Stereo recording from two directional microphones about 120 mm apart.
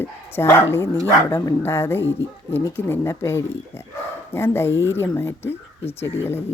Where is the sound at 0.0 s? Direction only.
20° left (ahead or behind).